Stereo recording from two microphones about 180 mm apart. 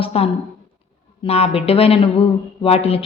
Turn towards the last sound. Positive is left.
turn(degrees=35)  # may be behind; listen again after turning